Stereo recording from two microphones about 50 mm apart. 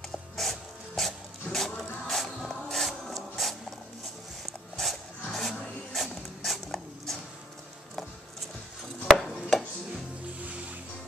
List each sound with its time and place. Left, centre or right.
0.4 s music: centre
4.5 s a sound: centre
9.0 s chopping: centre
10.4 s music: right